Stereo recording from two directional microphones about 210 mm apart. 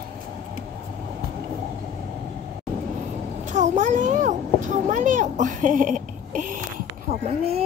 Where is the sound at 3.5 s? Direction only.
35° right (ahead or behind).